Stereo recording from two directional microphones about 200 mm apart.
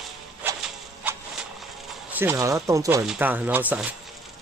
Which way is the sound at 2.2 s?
15° right (ahead or behind).